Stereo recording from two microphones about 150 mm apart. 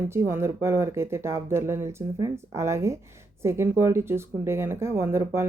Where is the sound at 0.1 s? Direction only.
15° right (ahead or behind).